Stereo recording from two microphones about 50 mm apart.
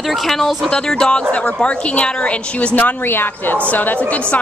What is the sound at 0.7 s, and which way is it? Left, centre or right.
Speech, centre.